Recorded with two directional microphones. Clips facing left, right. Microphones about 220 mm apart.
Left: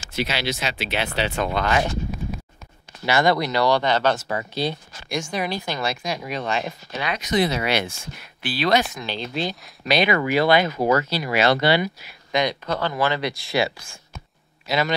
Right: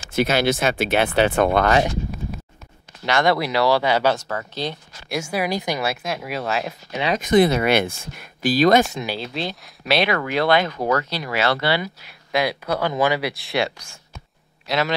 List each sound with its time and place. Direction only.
0.1 s speech: 50° right (ahead or behind)
3.1 s speech: centre (ahead or behind)
4.2 s speech: 10° left (ahead or behind)
5.0 s speech: 5° right (ahead or behind)
7.2 s speech: 50° right (ahead or behind)
9.0 s speech: 5° right (ahead or behind)
11.3 s speech: 20° left (ahead or behind)
12.0 s speech: centre (ahead or behind)
13.3 s speech: centre (ahead or behind)